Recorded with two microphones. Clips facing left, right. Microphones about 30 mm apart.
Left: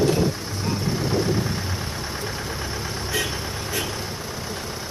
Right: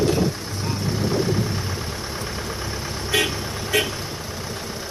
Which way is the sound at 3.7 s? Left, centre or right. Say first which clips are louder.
Right 8 dB; right.